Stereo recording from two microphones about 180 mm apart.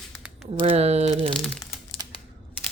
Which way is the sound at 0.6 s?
35° right (ahead or behind).